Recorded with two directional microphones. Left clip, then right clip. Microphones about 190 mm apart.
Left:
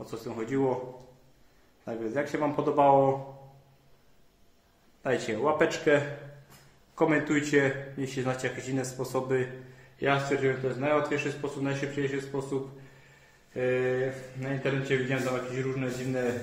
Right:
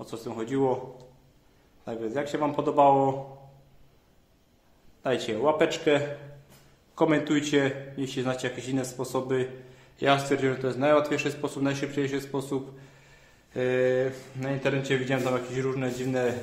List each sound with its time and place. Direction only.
0.0 s speech: 10° right (ahead or behind)
1.9 s speech: 10° right (ahead or behind)
2.5 s a man's voice: 20° right (ahead or behind)
5.0 s speech: 10° right (ahead or behind)
5.6 s a man's voice: 20° right (ahead or behind)
7.0 s a man's voice: 10° right (ahead or behind); by 16.3 s 30° right (ahead or behind)